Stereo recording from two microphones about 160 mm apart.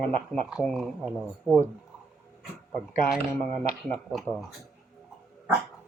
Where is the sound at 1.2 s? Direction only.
15° right (ahead or behind).